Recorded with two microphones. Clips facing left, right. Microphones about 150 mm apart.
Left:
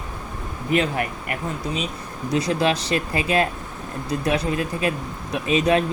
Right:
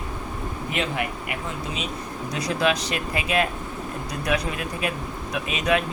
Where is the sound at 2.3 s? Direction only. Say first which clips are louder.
Left 3 dB; 25° left (ahead or behind).